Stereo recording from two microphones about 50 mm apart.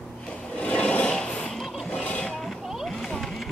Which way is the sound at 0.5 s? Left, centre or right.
Left.